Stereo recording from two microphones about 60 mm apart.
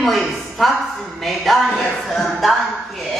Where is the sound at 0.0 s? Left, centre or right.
Centre.